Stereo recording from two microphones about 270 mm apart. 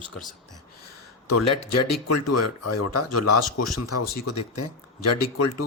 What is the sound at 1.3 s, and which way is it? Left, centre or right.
Speech, left.